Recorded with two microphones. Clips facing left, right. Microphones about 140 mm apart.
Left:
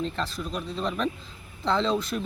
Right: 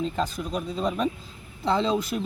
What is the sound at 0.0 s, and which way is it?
Speech, 10° right (ahead or behind).